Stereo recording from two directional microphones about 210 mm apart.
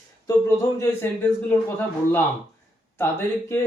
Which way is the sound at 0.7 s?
10° left (ahead or behind).